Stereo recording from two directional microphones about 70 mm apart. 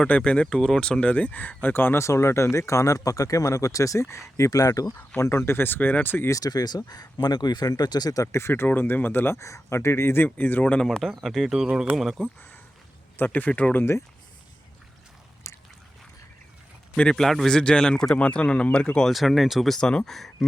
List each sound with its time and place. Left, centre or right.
0.0 s speech: centre; by 4.9 s left
4.9 s speech: left
6.3 s speech: left
8.3 s speech: left
8.6 s speech: left
10.8 s speech: centre
13.1 s speech: left
15.4 s a sound: left
17.0 s speech: centre
19.0 s speech: centre